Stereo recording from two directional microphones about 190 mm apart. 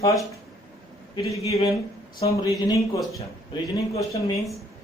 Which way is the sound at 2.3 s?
20° left (ahead or behind).